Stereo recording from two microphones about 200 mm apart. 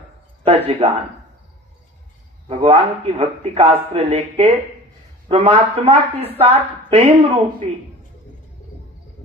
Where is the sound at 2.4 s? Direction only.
30° right (ahead or behind).